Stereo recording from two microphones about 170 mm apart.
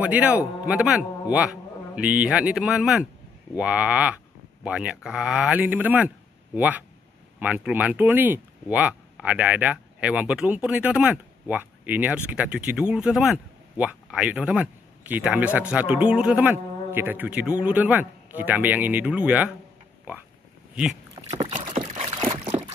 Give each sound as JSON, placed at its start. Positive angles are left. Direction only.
{"t": 0.0, "sound": "a man's voice", "side_deg": -10}
{"t": 21.1, "sound": "rowboat", "side_deg": -35}
{"t": 21.9, "sound": "boat", "side_deg": -40}